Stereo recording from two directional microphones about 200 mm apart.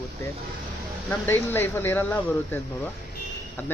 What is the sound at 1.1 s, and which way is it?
Speech, 10° left (ahead or behind).